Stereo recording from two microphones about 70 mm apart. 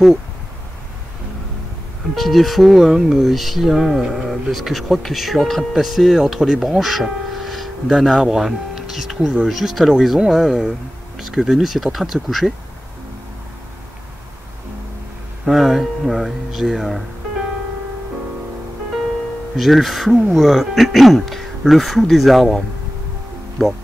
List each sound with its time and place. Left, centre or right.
2.1 s speech: centre
15.4 s speech: centre
19.5 s speech: centre
23.6 s speech: centre